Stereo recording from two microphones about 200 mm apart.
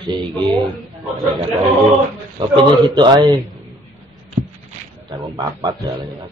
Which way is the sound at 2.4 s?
25° right (ahead or behind).